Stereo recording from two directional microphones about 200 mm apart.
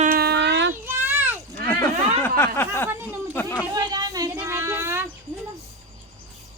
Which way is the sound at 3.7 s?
20° right (ahead or behind).